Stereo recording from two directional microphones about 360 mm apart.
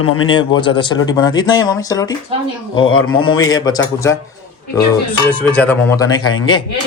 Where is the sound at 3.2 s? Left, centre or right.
Centre.